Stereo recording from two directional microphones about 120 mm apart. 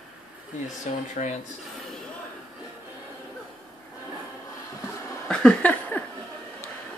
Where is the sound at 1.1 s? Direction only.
90° left.